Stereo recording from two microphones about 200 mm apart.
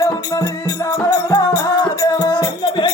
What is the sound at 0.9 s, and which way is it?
Music, 15° left (ahead or behind).